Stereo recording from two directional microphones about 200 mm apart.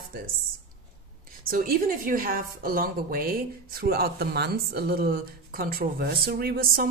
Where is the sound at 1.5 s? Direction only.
45° right (ahead or behind).